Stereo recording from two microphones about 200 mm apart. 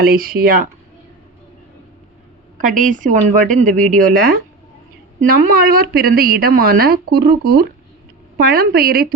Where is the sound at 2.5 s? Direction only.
40° right (ahead or behind).